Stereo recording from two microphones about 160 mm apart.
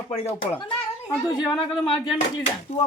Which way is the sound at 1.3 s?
25° left (ahead or behind).